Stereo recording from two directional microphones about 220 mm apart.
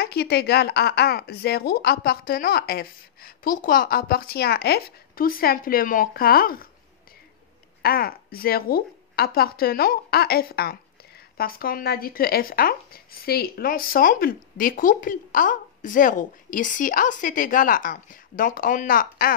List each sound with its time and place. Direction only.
0.0 s speech: 45° left (ahead or behind)
7.8 s a woman's voice: 45° left (ahead or behind)